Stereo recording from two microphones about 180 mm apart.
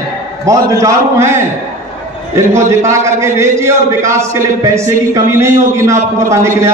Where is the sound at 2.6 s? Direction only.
15° right (ahead or behind).